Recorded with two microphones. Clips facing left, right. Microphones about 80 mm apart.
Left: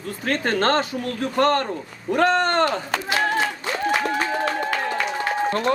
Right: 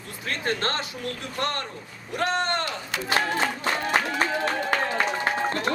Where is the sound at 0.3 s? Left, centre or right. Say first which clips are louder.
Left 7 dB; left.